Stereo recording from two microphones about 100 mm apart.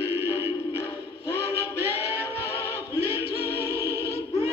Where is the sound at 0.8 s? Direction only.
25° left (ahead or behind).